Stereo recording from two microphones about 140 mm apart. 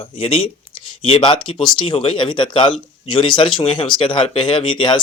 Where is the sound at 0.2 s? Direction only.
40° left (ahead or behind).